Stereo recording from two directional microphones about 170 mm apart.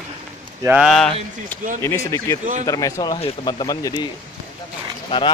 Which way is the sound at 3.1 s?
35° left (ahead or behind).